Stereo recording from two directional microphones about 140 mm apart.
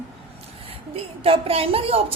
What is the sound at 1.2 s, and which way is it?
Speech, 40° right (ahead or behind).